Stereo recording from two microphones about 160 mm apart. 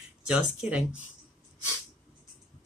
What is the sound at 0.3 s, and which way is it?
Speech, 5° right (ahead or behind).